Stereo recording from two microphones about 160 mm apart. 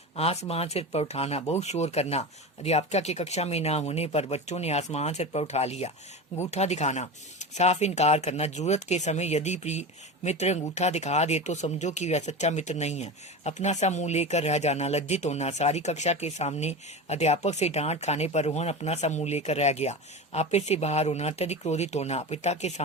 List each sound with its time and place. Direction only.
0.2 s speech: 40° left (ahead or behind)